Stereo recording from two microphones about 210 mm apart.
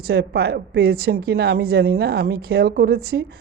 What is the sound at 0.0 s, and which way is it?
A woman's voice, 50° right (ahead or behind).